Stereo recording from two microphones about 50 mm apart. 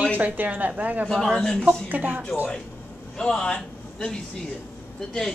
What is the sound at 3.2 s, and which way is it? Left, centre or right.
A man's voice, centre.